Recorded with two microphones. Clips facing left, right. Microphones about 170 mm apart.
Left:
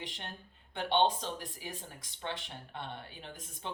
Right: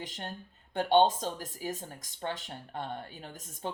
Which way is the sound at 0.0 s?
40° right (ahead or behind).